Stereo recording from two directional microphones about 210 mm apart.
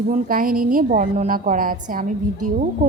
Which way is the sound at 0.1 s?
40° right (ahead or behind).